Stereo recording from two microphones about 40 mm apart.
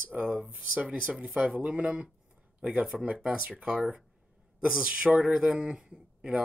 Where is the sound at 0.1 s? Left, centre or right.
Right.